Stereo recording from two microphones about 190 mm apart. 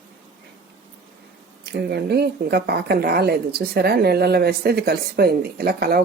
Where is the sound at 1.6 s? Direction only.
60° right (ahead or behind).